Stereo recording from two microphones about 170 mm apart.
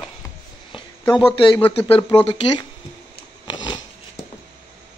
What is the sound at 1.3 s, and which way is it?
Speech, 30° left (ahead or behind).